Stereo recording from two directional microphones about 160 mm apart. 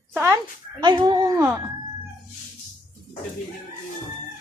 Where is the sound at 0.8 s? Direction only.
30° right (ahead or behind).